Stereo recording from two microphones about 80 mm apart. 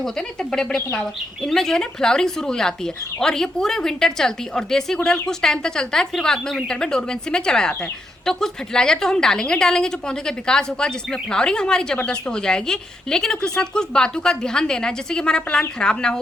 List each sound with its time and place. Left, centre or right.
0.0 s a woman's voice: centre